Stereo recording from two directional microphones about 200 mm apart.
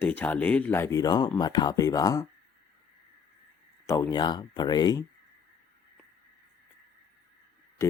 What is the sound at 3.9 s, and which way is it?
Speech, 20° left (ahead or behind).